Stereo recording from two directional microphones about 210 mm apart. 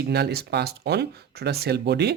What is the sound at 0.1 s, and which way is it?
Speech, 50° right (ahead or behind).